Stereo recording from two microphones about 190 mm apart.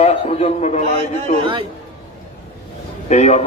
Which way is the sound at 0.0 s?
30° left (ahead or behind).